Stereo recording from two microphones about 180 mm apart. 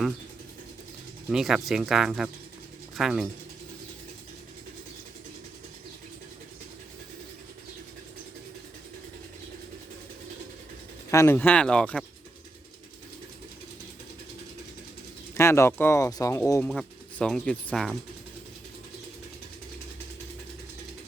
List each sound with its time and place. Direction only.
1.3 s speech: 5° right (ahead or behind)
11.1 s speech: 15° left (ahead or behind)
15.4 s speech: 15° left (ahead or behind)